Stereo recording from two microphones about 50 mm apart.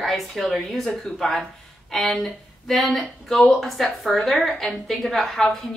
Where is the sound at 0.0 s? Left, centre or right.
Centre.